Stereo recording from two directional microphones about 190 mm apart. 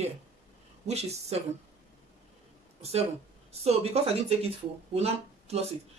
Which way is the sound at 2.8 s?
35° right (ahead or behind).